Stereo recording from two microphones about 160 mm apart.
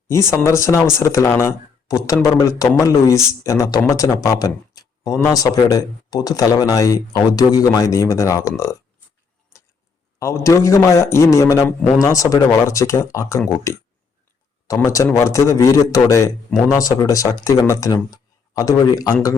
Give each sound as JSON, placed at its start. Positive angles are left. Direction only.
{"t": 0.1, "sound": "speech", "side_deg": 15}
{"t": 10.2, "sound": "speech", "side_deg": 20}
{"t": 14.8, "sound": "speech", "side_deg": 20}